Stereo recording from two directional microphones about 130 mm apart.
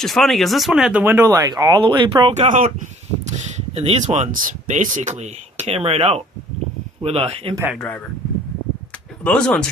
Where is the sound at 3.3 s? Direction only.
60° right (ahead or behind); by 5.0 s 85° right.